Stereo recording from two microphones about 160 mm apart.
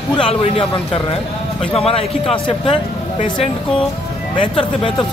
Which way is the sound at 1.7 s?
35° left (ahead or behind).